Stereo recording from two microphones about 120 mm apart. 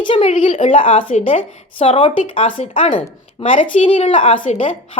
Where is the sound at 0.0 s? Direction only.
50° left (ahead or behind).